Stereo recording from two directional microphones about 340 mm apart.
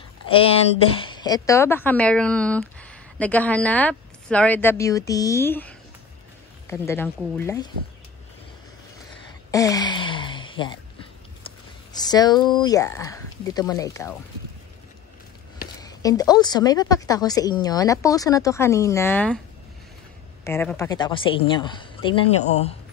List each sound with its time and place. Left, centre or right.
0.9 s speech: centre
9.5 s a sound: centre
11.4 s speech: centre
15.8 s speech: centre
20.4 s speech: centre